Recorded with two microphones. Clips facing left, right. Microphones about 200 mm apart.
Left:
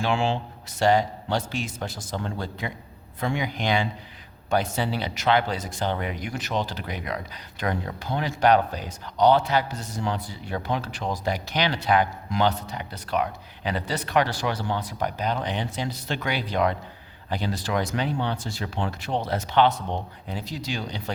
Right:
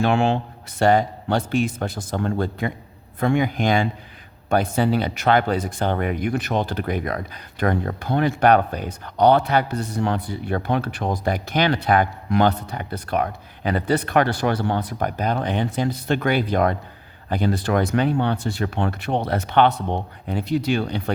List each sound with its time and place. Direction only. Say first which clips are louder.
0.0 s speech: right 5 dB; 60° right (ahead or behind)